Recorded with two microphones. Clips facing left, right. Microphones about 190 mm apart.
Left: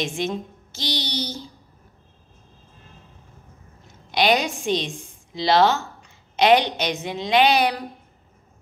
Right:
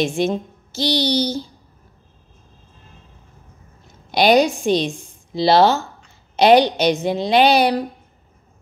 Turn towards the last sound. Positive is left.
turn(degrees=-35)  # may be behind; listen again after turning